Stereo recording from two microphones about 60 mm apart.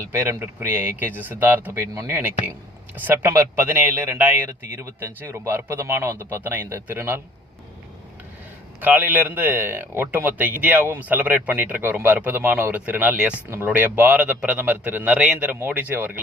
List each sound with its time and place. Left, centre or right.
0.0 s speech: right
3.2 s speech: right
8.8 s speech: right